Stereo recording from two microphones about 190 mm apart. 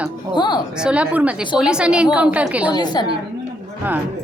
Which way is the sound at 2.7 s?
20° left (ahead or behind).